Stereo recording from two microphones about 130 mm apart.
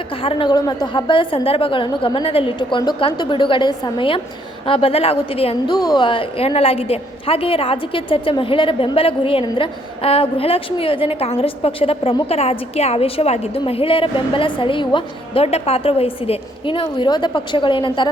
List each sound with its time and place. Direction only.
0.2 s a woman's voice: 45° left (ahead or behind)
5.7 s a woman's voice: 30° left (ahead or behind)
15.4 s a woman's voice: 55° left (ahead or behind)